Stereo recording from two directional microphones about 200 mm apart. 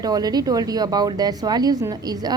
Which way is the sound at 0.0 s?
20° right (ahead or behind).